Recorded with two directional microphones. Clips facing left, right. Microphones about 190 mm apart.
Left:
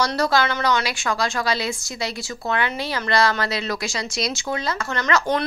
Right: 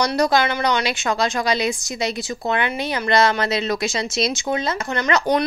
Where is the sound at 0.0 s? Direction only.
15° right (ahead or behind).